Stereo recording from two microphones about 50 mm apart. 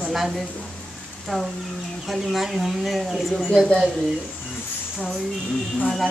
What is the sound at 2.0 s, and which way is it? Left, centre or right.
Speech, centre.